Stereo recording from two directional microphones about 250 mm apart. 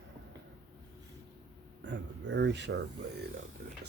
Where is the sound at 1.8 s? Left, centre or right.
Right.